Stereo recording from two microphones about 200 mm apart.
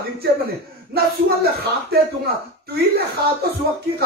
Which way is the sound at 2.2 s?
50° right (ahead or behind).